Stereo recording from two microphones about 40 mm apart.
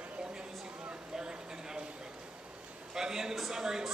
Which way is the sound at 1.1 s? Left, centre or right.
Centre.